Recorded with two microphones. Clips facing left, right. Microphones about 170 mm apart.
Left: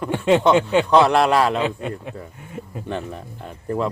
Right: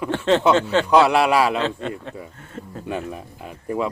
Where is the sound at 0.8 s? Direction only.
10° right (ahead or behind).